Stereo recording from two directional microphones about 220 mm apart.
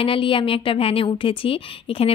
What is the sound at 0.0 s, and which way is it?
A woman's voice, 25° left (ahead or behind).